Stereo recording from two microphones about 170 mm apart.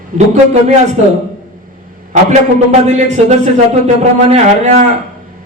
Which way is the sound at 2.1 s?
40° right (ahead or behind).